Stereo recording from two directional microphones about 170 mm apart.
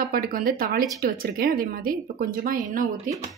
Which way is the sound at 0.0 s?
60° right (ahead or behind).